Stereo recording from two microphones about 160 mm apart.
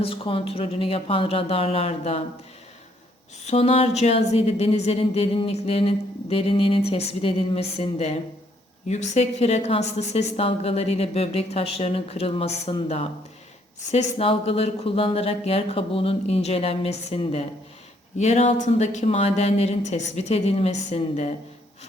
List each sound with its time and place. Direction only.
0.0 s speech: 35° left (ahead or behind)
3.4 s speech: 40° left (ahead or behind)